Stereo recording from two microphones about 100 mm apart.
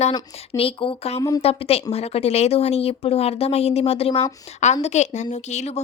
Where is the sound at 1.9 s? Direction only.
90° left.